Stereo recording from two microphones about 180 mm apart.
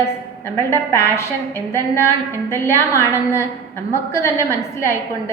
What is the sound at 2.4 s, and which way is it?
Speech, 10° left (ahead or behind).